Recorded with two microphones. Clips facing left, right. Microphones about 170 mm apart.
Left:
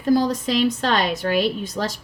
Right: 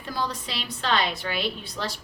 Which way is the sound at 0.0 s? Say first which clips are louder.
Left 12 dB; 45° left (ahead or behind).